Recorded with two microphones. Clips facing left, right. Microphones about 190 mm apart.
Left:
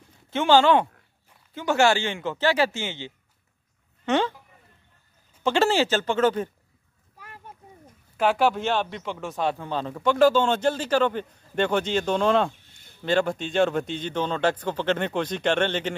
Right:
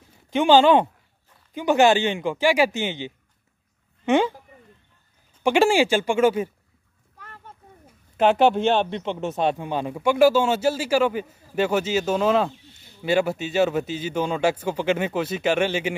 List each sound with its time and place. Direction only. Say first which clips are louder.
0.3 s speech: right 3 dB; 15° right (ahead or behind)
5.4 s speech: right 3 dB; 15° right (ahead or behind)
7.2 s a sound: even; 10° left (ahead or behind)
8.2 s speech: right 4 dB; 25° right (ahead or behind)